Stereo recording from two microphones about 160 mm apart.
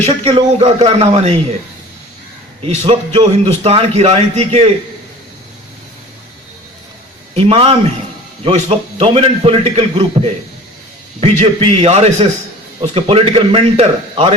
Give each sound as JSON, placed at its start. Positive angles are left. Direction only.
{"t": 0.0, "sound": "a man's voice", "side_deg": -35}
{"t": 2.6, "sound": "a man's voice", "side_deg": -40}
{"t": 7.3, "sound": "a man's voice", "side_deg": -35}